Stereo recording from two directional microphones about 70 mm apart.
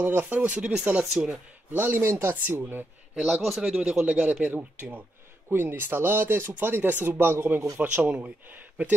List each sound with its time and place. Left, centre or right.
0.0 s speech: right
1.7 s speech: right
3.2 s speech: centre
3.4 s speech: centre; by 8.9 s right